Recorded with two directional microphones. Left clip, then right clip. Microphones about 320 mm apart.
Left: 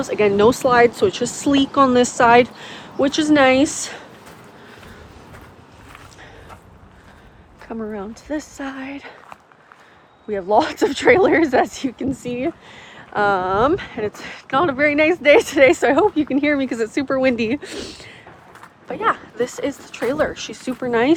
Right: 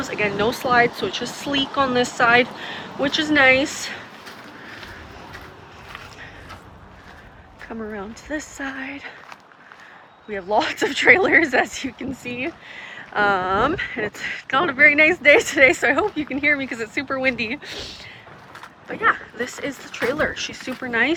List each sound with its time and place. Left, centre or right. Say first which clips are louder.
0.0 s speech: left 7 dB; centre
7.6 s speech: left 3 dB; centre
10.2 s speech: left 4 dB; centre